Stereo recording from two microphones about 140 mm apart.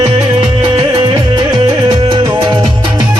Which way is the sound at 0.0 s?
40° right (ahead or behind).